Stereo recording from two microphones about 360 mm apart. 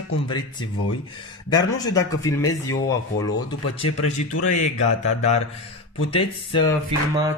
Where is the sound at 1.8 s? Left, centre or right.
Centre.